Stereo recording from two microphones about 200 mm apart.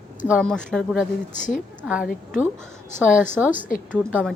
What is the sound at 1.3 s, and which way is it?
Speech, 40° left (ahead or behind).